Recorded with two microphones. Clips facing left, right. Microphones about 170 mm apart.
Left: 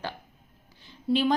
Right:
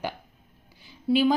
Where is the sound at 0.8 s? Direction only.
5° right (ahead or behind).